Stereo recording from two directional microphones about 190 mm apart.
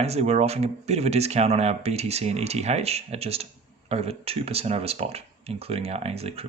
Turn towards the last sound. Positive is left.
turn(degrees=-30)  # may be behind; listen again after turning